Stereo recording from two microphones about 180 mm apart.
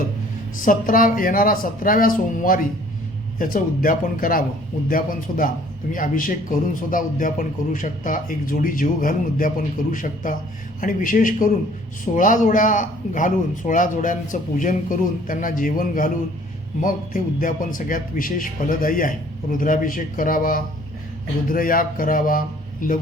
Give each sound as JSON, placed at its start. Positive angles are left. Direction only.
{"t": 0.6, "sound": "a man's voice", "side_deg": 50}